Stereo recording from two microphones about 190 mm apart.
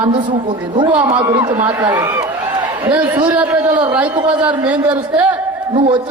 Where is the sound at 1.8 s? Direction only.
20° right (ahead or behind).